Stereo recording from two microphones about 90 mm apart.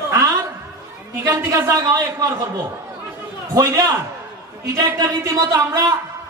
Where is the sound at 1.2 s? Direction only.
40° right (ahead or behind).